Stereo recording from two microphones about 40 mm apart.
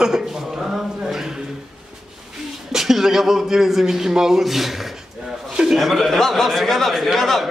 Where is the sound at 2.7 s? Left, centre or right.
Centre.